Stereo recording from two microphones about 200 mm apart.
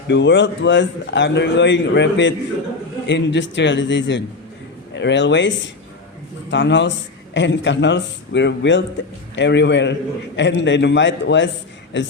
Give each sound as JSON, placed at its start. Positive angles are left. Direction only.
{"t": 0.1, "sound": "a man's voice", "side_deg": 65}